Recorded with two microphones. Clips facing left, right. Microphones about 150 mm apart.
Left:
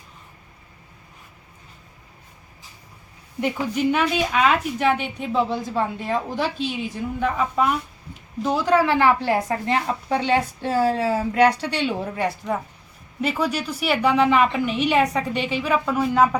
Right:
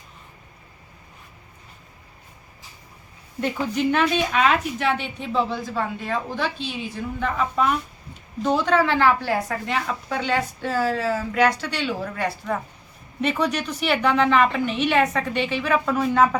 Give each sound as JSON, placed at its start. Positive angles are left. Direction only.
{"t": 3.4, "sound": "a woman's voice", "side_deg": 10}
{"t": 7.2, "sound": "a woman's voice", "side_deg": 10}
{"t": 9.6, "sound": "speech", "side_deg": 30}
{"t": 13.2, "sound": "a woman's voice", "side_deg": 5}